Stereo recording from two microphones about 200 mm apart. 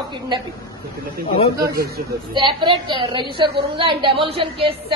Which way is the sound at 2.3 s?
25° right (ahead or behind).